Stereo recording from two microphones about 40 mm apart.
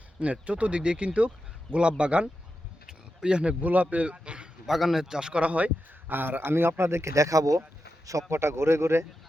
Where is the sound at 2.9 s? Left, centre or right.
Right.